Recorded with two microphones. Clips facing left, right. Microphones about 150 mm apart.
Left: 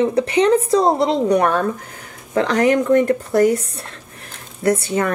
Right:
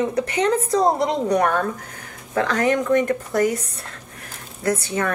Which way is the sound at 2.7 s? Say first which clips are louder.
Left 4 dB; 30° left (ahead or behind).